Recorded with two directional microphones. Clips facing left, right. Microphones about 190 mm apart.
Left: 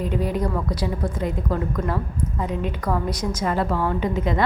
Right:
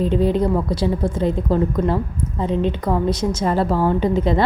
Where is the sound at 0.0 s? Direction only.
25° right (ahead or behind).